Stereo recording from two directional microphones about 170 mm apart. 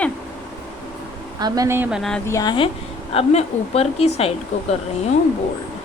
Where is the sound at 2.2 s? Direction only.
20° left (ahead or behind).